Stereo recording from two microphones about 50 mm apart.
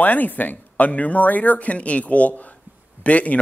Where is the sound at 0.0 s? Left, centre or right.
Left.